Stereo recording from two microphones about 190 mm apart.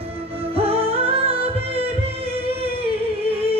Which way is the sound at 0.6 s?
30° right (ahead or behind).